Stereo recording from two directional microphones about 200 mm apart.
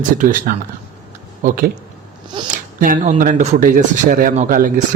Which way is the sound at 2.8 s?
40° right (ahead or behind).